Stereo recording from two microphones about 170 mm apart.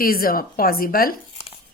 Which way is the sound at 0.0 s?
60° left (ahead or behind).